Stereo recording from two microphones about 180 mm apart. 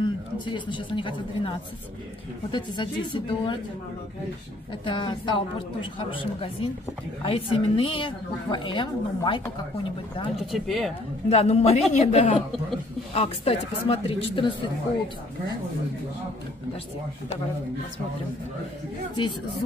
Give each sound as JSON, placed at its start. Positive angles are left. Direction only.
{"t": 0.0, "sound": "a woman's voice", "side_deg": 25}
{"t": 4.8, "sound": "a woman's voice", "side_deg": 25}
{"t": 10.3, "sound": "speech", "side_deg": 0}
{"t": 11.2, "sound": "speech", "side_deg": 35}